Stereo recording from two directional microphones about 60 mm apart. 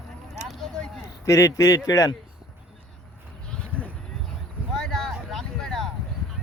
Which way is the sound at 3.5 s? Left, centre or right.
Left.